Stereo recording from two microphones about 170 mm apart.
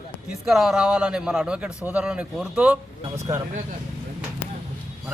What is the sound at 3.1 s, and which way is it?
Speech, 15° right (ahead or behind).